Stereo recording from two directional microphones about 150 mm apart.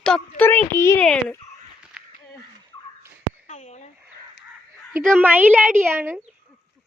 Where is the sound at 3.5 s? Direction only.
50° left (ahead or behind).